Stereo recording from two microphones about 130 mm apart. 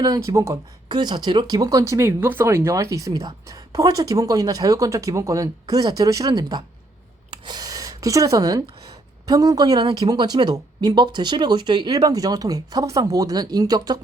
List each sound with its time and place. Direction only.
0.0 s speech: 25° right (ahead or behind)
0.9 s speech: 35° right (ahead or behind)
7.3 s a sound: 35° right (ahead or behind)
9.2 s speech: 30° right (ahead or behind)